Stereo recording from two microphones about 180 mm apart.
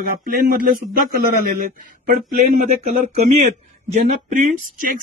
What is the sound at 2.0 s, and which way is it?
Speech, 45° right (ahead or behind).